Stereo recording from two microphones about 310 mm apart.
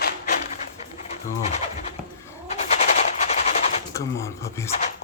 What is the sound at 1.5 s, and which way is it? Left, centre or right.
Speech, left.